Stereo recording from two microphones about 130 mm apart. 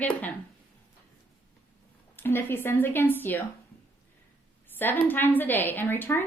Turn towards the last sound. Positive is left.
turn(degrees=15)  # may be behind; listen again after turning